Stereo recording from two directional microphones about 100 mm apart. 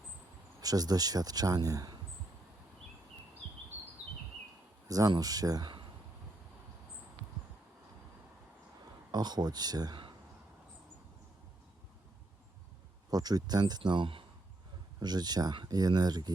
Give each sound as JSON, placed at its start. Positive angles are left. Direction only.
{"t": 0.6, "sound": "speech", "side_deg": -40}
{"t": 4.9, "sound": "speech", "side_deg": -40}
{"t": 9.1, "sound": "speech", "side_deg": -45}
{"t": 13.1, "sound": "speech", "side_deg": -40}
{"t": 15.0, "sound": "speech", "side_deg": -45}